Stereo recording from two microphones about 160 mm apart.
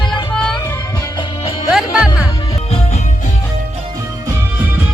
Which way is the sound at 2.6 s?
40° left (ahead or behind).